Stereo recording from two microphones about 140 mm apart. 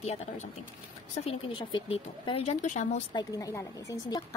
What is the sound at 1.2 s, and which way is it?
Speech, 40° left (ahead or behind).